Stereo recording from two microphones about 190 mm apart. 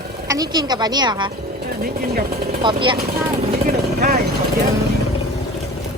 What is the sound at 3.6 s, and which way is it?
Vehicle, 50° right (ahead or behind).